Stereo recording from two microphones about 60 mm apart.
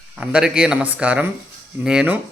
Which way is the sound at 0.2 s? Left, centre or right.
Centre.